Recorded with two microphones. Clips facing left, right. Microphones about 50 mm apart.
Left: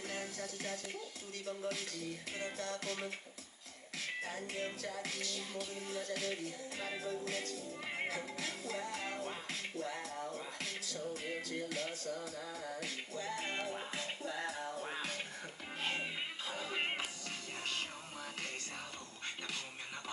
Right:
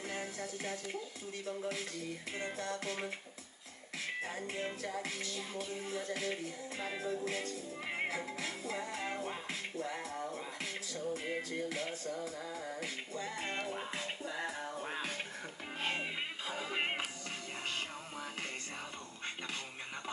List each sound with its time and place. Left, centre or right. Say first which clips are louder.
0.0 s music: right 2 dB; centre
4.2 s music: right 1 dB; centre